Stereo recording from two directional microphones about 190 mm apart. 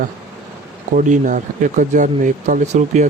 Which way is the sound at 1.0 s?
40° right (ahead or behind).